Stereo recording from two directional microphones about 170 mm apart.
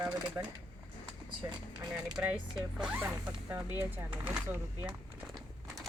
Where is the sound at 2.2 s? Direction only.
15° right (ahead or behind).